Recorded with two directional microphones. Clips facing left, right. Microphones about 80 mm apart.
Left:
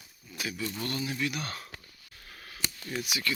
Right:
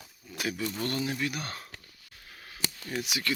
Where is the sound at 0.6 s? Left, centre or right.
Right.